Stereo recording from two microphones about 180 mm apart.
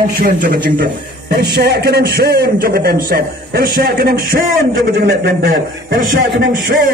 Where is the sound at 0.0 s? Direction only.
50° right (ahead or behind).